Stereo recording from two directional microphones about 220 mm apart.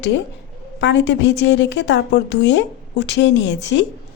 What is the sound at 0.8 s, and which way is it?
A woman's voice, 55° left (ahead or behind).